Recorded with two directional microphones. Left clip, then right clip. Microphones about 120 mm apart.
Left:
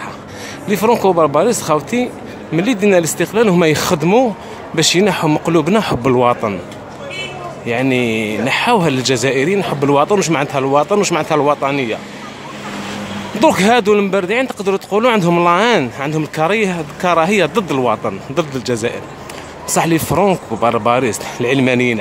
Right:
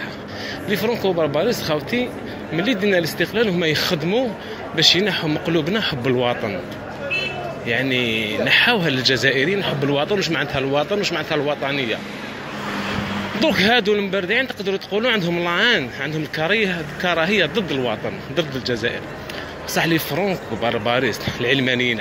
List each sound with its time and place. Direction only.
1.0 s speech: 40° left (ahead or behind); by 4.3 s 60° left (ahead or behind)
4.7 s speech: 45° left (ahead or behind)
7.9 s speech: 35° left (ahead or behind)
13.4 s speech: 40° left (ahead or behind)
15.4 s speech: 35° left (ahead or behind)
20.6 s speech: 30° left (ahead or behind)